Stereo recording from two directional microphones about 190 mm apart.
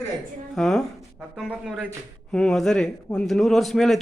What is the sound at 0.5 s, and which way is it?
A man's voice, centre (ahead or behind).